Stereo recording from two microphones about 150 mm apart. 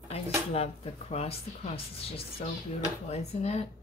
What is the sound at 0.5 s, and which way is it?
A woman's voice, 40° left (ahead or behind).